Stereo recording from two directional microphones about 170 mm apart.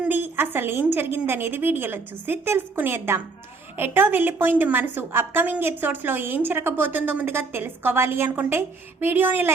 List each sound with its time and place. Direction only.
0.0 s a woman's voice: 10° right (ahead or behind)